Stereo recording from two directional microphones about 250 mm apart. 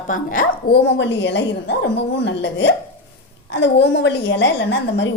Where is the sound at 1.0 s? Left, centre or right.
Left.